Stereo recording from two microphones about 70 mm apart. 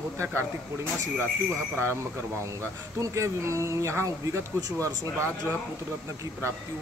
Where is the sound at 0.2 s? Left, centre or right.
Right.